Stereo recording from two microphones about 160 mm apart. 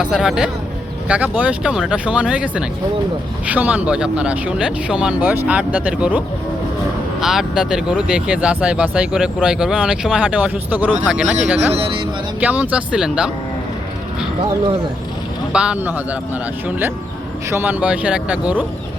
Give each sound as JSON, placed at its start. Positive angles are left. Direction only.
{"t": 0.0, "sound": "speech", "side_deg": -5}
{"t": 11.7, "sound": "speech", "side_deg": -35}
{"t": 12.4, "sound": "speech", "side_deg": -10}
{"t": 15.5, "sound": "speech", "side_deg": -5}